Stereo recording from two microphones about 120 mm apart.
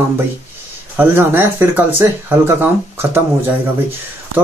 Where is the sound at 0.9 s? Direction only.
20° right (ahead or behind).